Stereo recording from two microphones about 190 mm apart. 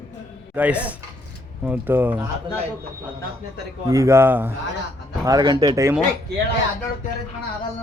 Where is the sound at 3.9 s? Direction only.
15° right (ahead or behind).